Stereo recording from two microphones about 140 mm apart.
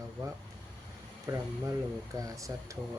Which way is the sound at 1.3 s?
20° right (ahead or behind).